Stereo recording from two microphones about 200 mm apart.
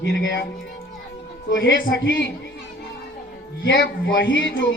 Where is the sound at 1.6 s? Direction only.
70° left (ahead or behind).